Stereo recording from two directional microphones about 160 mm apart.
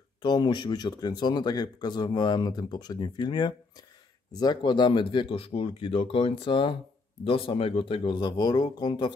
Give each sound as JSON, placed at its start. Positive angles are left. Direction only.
{"t": 0.2, "sound": "speech", "side_deg": 25}